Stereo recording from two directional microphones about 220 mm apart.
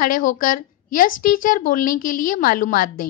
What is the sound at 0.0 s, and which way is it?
A woman's voice, 35° left (ahead or behind).